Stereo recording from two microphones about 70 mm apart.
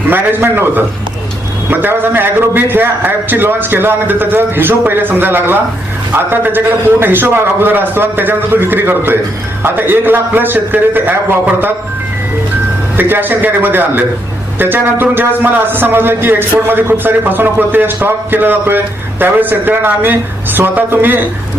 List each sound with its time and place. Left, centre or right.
0.1 s a man's voice: right
13.0 s a man's voice: right